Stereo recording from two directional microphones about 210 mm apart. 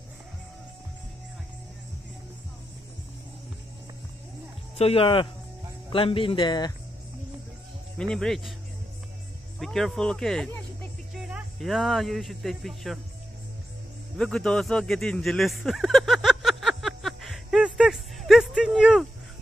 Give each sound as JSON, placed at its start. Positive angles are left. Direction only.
{"t": 4.7, "sound": "speech", "side_deg": 30}
{"t": 8.1, "sound": "speech", "side_deg": 0}
{"t": 9.6, "sound": "speech", "side_deg": 0}
{"t": 14.1, "sound": "a sound", "side_deg": 5}